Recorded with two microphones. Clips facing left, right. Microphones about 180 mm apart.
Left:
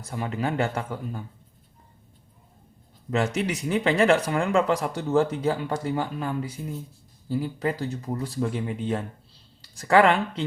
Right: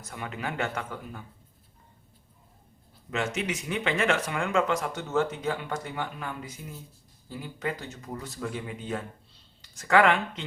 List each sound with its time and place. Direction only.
0.0 s speech: 30° left (ahead or behind)
3.1 s speech: 35° left (ahead or behind)